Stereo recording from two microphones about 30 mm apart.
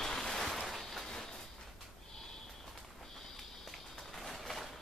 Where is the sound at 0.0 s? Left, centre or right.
Centre.